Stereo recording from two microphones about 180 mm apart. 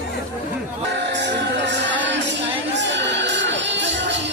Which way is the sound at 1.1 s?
75° right (ahead or behind).